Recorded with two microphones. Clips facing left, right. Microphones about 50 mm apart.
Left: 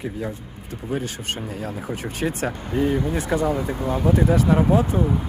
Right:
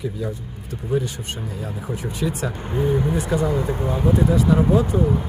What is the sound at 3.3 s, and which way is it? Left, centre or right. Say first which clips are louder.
Speech: even; left.